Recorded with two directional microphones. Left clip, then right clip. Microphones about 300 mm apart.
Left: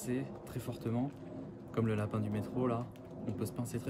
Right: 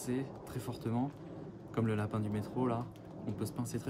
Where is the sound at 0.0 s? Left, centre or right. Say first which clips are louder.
Even; centre.